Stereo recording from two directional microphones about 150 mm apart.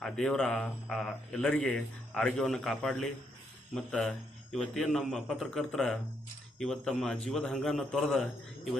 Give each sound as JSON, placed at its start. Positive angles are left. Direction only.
{"t": 0.0, "sound": "speech", "side_deg": 5}